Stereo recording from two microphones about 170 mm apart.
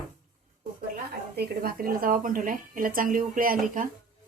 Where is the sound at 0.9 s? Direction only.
65° right (ahead or behind).